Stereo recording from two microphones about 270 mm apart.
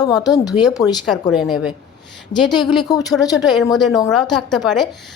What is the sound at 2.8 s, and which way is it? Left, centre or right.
Speech, centre.